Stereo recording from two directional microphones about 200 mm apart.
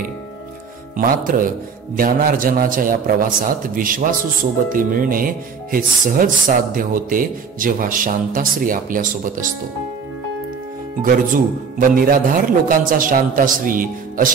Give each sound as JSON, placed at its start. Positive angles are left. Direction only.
{"t": 0.9, "sound": "speech", "side_deg": -45}
{"t": 11.0, "sound": "speech", "side_deg": -45}